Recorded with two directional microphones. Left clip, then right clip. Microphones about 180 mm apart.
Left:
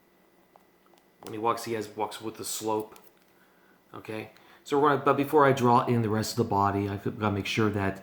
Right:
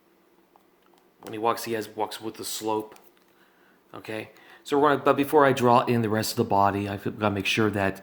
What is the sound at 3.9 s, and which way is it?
Speech, 40° right (ahead or behind).